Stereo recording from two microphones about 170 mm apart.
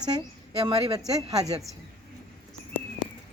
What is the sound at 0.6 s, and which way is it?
Speech, 35° right (ahead or behind).